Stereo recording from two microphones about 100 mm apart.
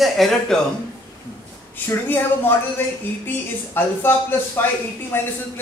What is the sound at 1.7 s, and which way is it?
Speech, 20° left (ahead or behind).